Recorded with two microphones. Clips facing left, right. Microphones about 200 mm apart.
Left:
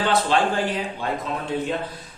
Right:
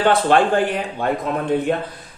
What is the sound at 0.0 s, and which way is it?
Speech, 55° right (ahead or behind).